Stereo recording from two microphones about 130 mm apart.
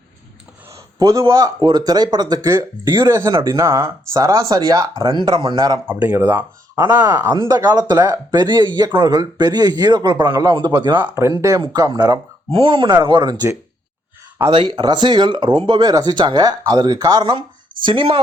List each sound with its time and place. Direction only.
0.7 s a man's voice: 25° right (ahead or behind)
5.9 s speech: 15° right (ahead or behind)
7.4 s speech: 30° right (ahead or behind)
11.0 s speech: 20° right (ahead or behind)
11.6 s speech: 35° right (ahead or behind)
12.5 s speech: 45° right (ahead or behind); by 13.6 s 30° right (ahead or behind)
14.5 s speech: 40° right (ahead or behind)